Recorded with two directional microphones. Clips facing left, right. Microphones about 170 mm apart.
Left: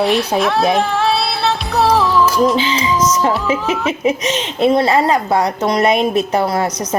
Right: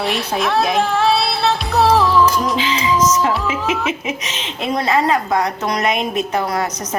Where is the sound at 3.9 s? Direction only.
35° left (ahead or behind).